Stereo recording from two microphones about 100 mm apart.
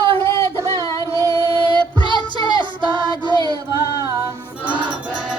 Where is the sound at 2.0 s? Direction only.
55° right (ahead or behind).